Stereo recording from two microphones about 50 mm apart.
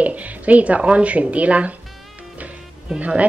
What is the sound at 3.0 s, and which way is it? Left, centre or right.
Speech, right.